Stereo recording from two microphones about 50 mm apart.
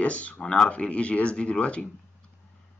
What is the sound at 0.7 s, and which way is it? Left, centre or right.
Speech, left.